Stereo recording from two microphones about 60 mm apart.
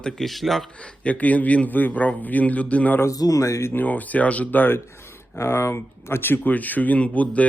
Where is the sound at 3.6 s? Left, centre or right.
Left.